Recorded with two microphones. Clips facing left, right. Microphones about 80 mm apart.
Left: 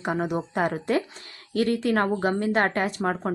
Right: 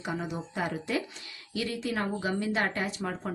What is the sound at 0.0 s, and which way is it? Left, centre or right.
Speech, left.